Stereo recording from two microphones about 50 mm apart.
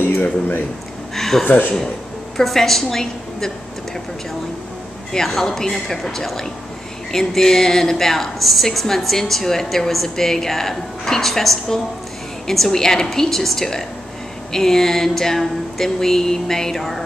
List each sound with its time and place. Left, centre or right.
0.0 s speech: left
1.1 s a sound: centre
1.4 s speech: left
2.3 s a woman's voice: centre
5.1 s a woman's voice: centre